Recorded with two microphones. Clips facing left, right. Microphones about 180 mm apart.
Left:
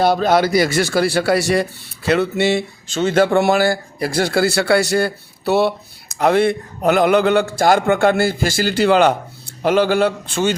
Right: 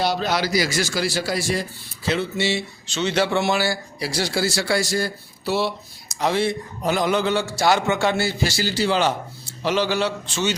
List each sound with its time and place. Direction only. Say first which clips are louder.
0.0 s a man's voice: left 8 dB; 50° left (ahead or behind)